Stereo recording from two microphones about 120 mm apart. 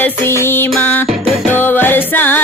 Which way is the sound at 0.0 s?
20° left (ahead or behind).